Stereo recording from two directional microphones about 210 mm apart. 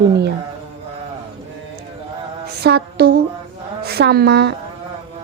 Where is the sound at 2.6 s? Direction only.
50° right (ahead or behind).